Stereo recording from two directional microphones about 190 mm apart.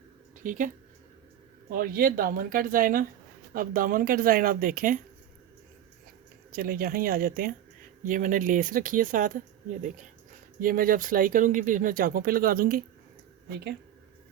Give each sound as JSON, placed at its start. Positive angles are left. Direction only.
{"t": 0.4, "sound": "speech", "side_deg": -45}
{"t": 1.7, "sound": "speech", "side_deg": -50}
{"t": 6.5, "sound": "speech", "side_deg": -50}
{"t": 10.6, "sound": "speech", "side_deg": -50}